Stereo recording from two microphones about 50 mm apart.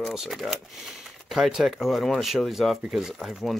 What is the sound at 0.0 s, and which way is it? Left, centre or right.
Speech, centre.